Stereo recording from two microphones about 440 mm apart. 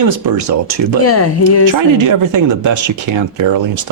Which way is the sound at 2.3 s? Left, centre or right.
Right.